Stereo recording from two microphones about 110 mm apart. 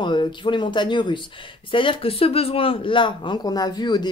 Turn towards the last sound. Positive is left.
turn(degrees=40)  # may be behind; listen again after turning